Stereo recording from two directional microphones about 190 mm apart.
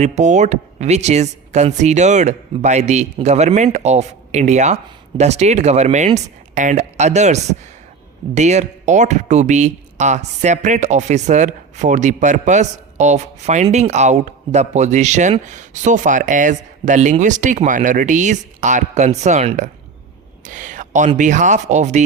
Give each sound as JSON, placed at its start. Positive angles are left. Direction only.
{"t": 0.0, "sound": "speech", "side_deg": -35}
{"t": 8.4, "sound": "speech", "side_deg": -40}
{"t": 20.4, "sound": "a sound", "side_deg": -40}
{"t": 21.2, "sound": "speech", "side_deg": -40}